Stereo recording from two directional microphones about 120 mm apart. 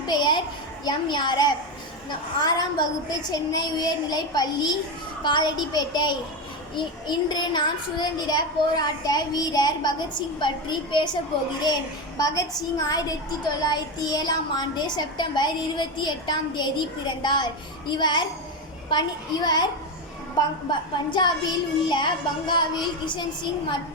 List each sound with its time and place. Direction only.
0.1 s a sound: 40° left (ahead or behind)
0.9 s a child's voice: 40° left (ahead or behind)
20.7 s a child's voice: 40° left (ahead or behind)